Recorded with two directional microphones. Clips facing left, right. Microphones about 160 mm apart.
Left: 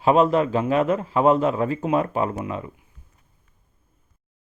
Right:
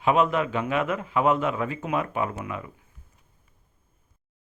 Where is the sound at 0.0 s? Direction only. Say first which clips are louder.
Left 5 dB; 35° left (ahead or behind).